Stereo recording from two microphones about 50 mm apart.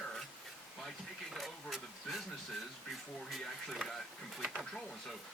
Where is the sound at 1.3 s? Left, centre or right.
Centre.